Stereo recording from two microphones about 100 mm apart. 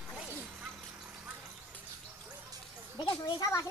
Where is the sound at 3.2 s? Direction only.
35° left (ahead or behind).